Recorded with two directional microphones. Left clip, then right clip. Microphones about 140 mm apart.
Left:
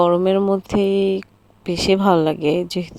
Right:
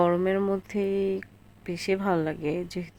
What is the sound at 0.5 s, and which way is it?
A woman's voice, 35° left (ahead or behind).